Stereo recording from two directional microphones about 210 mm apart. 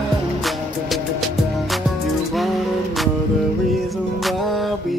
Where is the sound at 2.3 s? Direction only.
Centre (ahead or behind).